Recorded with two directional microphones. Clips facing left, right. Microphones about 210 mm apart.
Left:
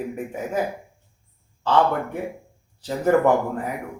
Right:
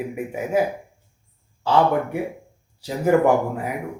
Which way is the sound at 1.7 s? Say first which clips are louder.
Right 2 dB; 10° right (ahead or behind).